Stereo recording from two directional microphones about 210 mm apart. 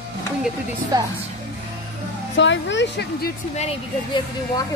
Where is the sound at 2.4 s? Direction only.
60° left (ahead or behind).